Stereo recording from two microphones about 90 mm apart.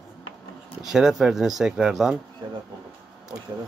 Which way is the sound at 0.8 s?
5° right (ahead or behind).